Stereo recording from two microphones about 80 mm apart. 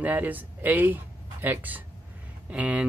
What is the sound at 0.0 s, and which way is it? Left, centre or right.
Speech, right.